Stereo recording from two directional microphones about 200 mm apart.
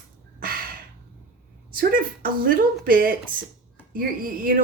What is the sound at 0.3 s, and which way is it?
Gasp, 45° right (ahead or behind).